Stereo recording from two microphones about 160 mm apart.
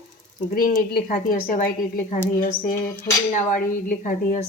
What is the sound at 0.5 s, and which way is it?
Speech, 60° left (ahead or behind).